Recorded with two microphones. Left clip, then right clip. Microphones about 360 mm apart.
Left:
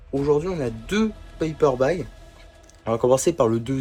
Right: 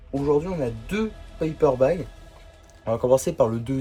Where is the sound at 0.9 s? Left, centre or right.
Left.